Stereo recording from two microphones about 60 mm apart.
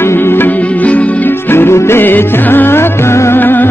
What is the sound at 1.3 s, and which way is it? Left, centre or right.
Music, left.